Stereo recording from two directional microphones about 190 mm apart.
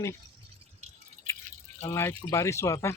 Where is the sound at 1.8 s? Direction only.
15° left (ahead or behind).